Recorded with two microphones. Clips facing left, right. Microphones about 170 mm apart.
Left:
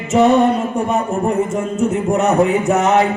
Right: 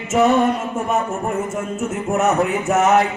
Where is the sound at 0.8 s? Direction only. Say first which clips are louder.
Left 2 dB; centre (ahead or behind).